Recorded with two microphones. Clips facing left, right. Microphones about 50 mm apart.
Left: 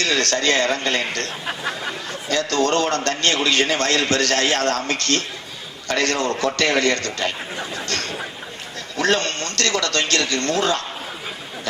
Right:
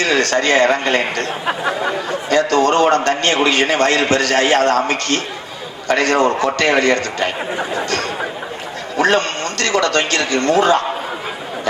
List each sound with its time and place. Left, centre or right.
0.0 s a man's voice: centre
1.5 s a man's voice: right
2.0 s a man's voice: centre